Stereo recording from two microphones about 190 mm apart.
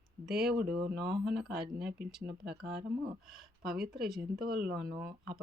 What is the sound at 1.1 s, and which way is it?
Speech, 60° right (ahead or behind).